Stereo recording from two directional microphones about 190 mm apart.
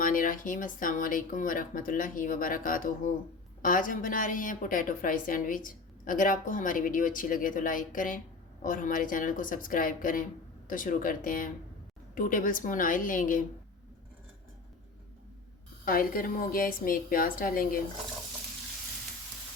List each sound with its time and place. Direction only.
0.0 s a woman's voice: 45° left (ahead or behind)
15.8 s a woman's voice: 50° left (ahead or behind)